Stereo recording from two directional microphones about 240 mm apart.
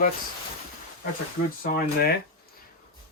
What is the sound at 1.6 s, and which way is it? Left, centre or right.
Speech, left.